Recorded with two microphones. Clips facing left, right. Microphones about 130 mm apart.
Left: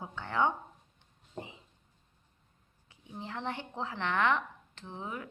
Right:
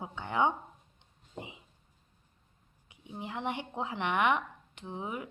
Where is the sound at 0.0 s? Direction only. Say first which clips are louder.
Right 1 dB; 15° right (ahead or behind).